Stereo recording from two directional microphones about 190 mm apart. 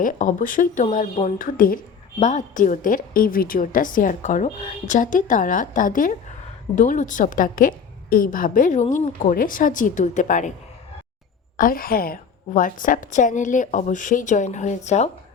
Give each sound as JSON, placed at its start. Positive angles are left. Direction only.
{"t": 0.0, "sound": "a woman's voice", "side_deg": 45}
{"t": 11.5, "sound": "a woman's voice", "side_deg": 50}